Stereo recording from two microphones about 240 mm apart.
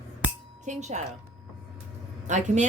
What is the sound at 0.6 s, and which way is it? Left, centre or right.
Speech, right.